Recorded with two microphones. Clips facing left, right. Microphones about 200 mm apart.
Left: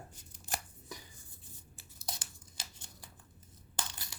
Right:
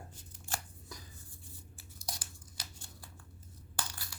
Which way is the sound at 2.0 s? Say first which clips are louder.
Left 1 dB; 25° left (ahead or behind).